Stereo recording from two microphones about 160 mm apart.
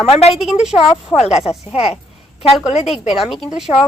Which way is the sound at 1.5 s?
40° left (ahead or behind).